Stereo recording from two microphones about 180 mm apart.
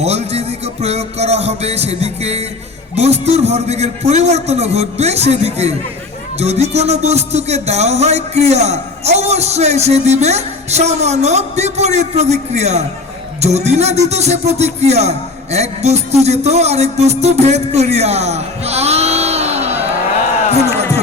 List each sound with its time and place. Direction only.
0.0 s music: 35° right (ahead or behind)